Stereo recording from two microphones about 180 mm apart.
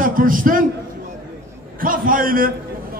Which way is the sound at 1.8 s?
50° right (ahead or behind).